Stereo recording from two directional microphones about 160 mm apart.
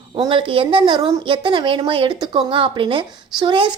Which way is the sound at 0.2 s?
30° right (ahead or behind).